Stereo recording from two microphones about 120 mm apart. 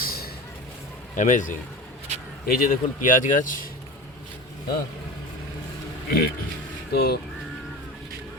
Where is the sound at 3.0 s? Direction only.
90° left.